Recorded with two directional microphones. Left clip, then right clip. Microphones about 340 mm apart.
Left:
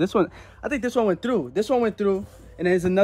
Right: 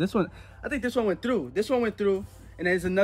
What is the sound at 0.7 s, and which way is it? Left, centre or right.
Speech, centre.